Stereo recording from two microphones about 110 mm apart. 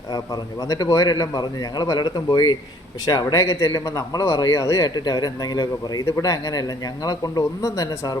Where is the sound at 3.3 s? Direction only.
25° left (ahead or behind).